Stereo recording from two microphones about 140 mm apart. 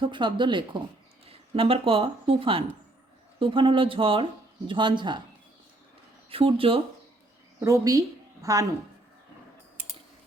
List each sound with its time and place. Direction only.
0.0 s speech: 35° right (ahead or behind)
6.3 s speech: 40° right (ahead or behind)
7.6 s a woman's voice: 25° right (ahead or behind)